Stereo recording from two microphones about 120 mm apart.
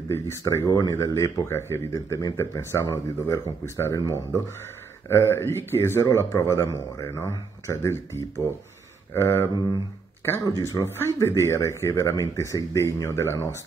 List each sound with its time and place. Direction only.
0.1 s speech: 25° left (ahead or behind)